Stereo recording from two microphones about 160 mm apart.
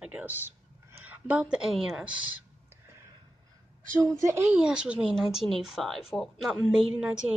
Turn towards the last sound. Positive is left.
turn(degrees=-5)  # may be behind; listen again after turning